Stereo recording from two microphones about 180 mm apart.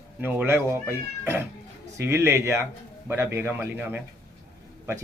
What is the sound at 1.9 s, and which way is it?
Speech, 15° right (ahead or behind).